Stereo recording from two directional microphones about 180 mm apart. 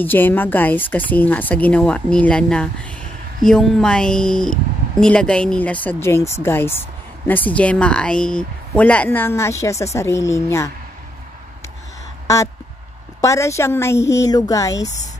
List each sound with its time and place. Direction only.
0.0 s speech: 10° left (ahead or behind)
13.2 s speech: 15° left (ahead or behind)